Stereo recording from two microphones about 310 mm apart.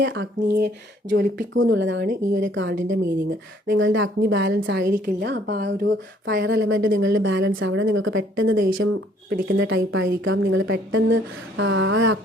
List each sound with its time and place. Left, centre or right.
0.0 s a woman's voice: right